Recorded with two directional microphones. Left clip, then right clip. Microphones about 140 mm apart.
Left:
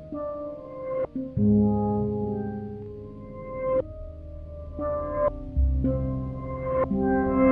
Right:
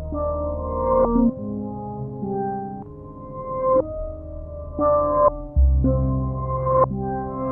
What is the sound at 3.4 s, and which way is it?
Music, 20° left (ahead or behind).